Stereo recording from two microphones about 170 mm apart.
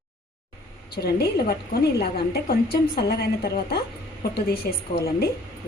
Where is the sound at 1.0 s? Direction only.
70° left (ahead or behind).